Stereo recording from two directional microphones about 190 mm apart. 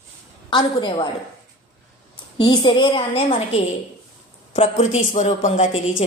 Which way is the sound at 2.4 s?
25° left (ahead or behind).